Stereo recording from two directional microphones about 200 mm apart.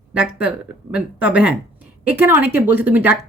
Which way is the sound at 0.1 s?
5° right (ahead or behind).